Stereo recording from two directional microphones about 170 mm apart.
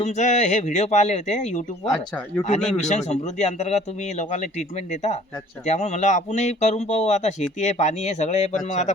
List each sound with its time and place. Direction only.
0.0 s speech: 45° left (ahead or behind)
2.7 s speech: 40° left (ahead or behind)